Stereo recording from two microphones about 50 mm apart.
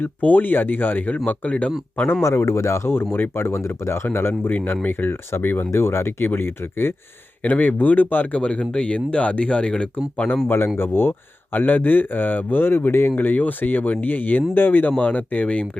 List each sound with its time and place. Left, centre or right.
0.0 s speech: left
2.2 s a man's voice: left
2.9 s speech: left
4.4 s speech: left
5.7 s speech: left
7.4 s speech: left
8.4 s speech: left
10.8 s speech: left
11.5 s speech: left